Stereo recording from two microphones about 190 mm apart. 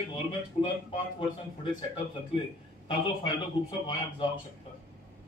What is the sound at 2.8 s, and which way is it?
Speech, 25° left (ahead or behind).